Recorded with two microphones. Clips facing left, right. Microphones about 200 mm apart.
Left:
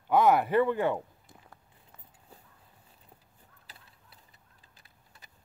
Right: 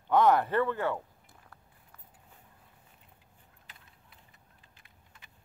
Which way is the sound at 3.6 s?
35° left (ahead or behind).